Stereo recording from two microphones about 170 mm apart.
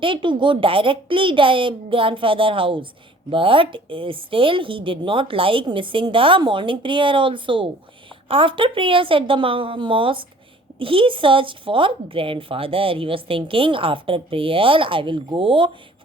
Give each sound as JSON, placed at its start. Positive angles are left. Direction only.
{"t": 0.0, "sound": "speech", "side_deg": -30}